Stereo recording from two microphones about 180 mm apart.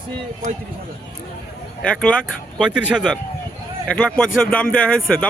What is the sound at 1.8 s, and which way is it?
Speech, 5° left (ahead or behind).